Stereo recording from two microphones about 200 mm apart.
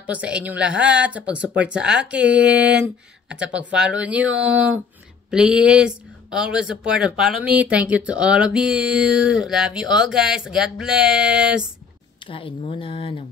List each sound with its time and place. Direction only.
0.0 s speech: 5° right (ahead or behind)
12.3 s speech: 25° left (ahead or behind)